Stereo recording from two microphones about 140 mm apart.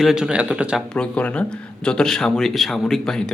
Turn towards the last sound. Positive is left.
turn(degrees=5)  # may be behind; listen again after turning